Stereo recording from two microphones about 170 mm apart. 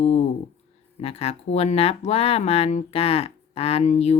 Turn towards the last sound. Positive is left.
turn(degrees=40)  # may be behind; listen again after turning